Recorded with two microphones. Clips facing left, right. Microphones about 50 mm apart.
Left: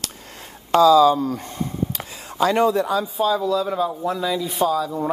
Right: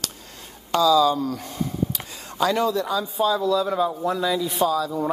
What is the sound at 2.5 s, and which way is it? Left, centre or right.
Speech, left.